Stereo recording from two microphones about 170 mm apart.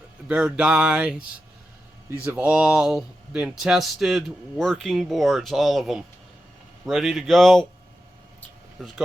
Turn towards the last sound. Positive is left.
turn(degrees=0)  # may be behind; listen again after turning